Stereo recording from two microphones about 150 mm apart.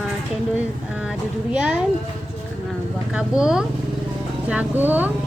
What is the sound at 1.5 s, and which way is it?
Speech, 10° right (ahead or behind).